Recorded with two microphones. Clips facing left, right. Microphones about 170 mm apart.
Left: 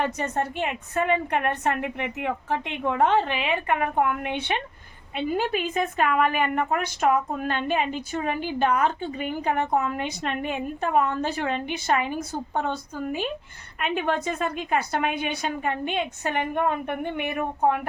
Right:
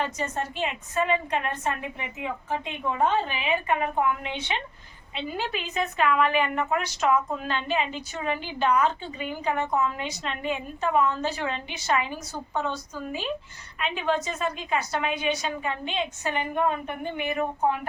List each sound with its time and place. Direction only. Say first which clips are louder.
0.0 s a woman's voice: left 3 dB; 60° left (ahead or behind)